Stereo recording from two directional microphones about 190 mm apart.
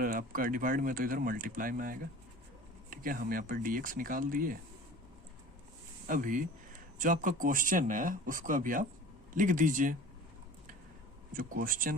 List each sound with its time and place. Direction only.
0.0 s speech: 45° right (ahead or behind)
6.1 s speech: 45° right (ahead or behind)
11.3 s speech: 45° right (ahead or behind)